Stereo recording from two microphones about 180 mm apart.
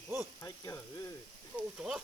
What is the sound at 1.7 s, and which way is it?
Speech, 5° right (ahead or behind).